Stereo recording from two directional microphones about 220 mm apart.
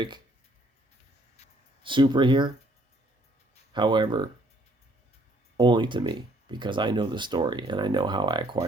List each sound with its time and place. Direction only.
1.8 s speech: 20° right (ahead or behind)
3.7 s speech: 20° right (ahead or behind)
5.5 s speech: 20° right (ahead or behind)